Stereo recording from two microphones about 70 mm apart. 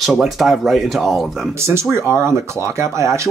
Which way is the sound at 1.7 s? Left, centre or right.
Right.